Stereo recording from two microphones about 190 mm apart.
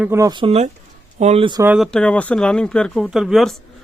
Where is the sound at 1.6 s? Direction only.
10° right (ahead or behind).